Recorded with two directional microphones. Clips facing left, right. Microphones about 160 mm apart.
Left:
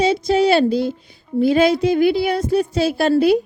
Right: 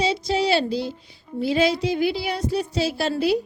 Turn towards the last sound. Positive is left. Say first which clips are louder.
# left 7 dB
turn(degrees=55)  # may be behind; listen again after turning